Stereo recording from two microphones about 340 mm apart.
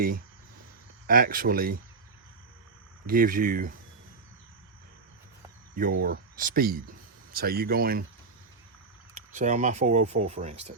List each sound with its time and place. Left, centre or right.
1.0 s speech: right
3.1 s speech: right
5.7 s speech: right
9.1 s speech: right